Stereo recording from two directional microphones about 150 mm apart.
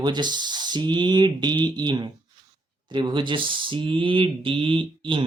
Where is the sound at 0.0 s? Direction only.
30° right (ahead or behind).